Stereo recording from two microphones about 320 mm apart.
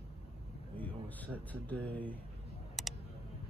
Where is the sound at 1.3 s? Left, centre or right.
Centre.